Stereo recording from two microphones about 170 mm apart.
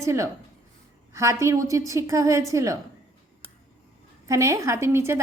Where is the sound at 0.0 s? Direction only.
20° right (ahead or behind).